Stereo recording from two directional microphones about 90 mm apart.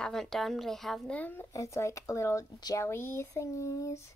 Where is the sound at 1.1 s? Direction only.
20° left (ahead or behind).